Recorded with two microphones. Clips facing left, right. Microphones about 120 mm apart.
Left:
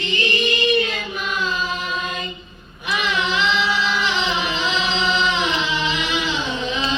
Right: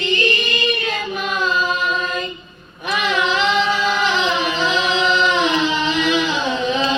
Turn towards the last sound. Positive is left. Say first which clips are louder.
# right 5 dB
turn(degrees=-45)  # may be behind; listen again after turning